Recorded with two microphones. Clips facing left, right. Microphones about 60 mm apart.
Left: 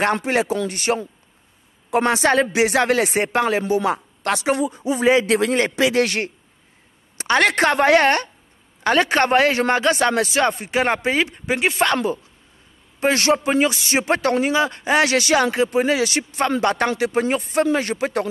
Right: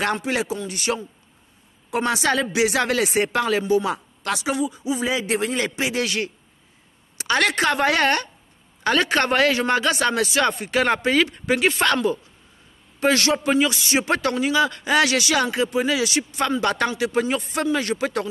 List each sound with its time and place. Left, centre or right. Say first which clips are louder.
0.0 s speech: left 4 dB; left
6.0 s speech: left 2 dB; left
10.7 s speech: even; left
13.0 s speech: left 2 dB; left